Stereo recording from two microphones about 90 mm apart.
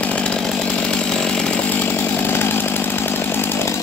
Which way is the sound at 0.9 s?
10° left (ahead or behind).